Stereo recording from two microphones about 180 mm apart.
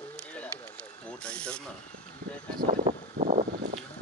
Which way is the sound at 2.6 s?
40° right (ahead or behind).